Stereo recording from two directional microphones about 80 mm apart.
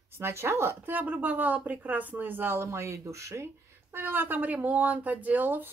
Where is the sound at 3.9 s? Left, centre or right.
Right.